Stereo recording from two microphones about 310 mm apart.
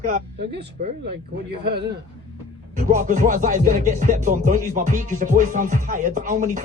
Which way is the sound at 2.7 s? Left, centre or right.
Right.